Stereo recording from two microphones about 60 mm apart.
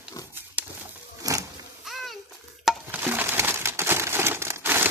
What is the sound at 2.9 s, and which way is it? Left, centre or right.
Crumpling, right.